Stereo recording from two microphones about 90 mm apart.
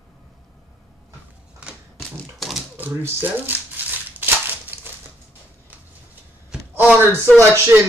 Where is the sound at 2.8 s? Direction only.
20° right (ahead or behind).